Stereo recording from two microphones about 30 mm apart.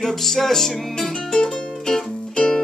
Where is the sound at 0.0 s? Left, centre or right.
Centre.